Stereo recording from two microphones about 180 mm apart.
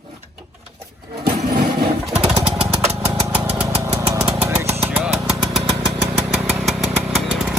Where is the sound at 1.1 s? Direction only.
60° right (ahead or behind).